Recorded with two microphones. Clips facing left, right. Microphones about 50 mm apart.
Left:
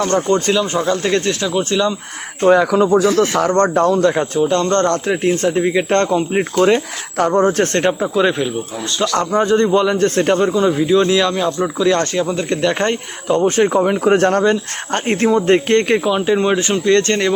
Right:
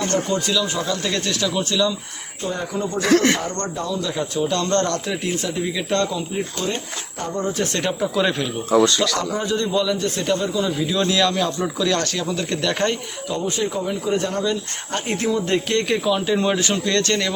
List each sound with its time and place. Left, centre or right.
0.3 s a man's voice: left
2.4 s speech: left
3.0 s a man's voice: right
3.4 s speech: left
4.4 s a man's voice: left
6.6 s speech: left
7.6 s speech: left
7.9 s speech: left
8.2 s speech: centre
8.7 s a man's voice: right
9.1 s a man's voice: left
13.2 s speech: left
13.8 s speech: left
16.0 s a man's voice: left